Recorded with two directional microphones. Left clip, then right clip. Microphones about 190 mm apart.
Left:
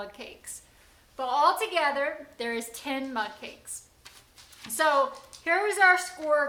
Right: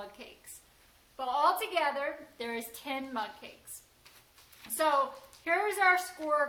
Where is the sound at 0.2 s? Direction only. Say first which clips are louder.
Left 7 dB; 15° left (ahead or behind).